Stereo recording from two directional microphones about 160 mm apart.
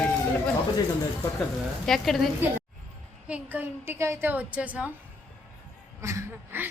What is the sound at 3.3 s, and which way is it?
A woman's voice, 10° right (ahead or behind).